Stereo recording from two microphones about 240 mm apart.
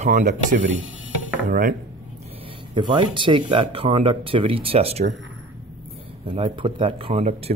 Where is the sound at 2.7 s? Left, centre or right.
Centre.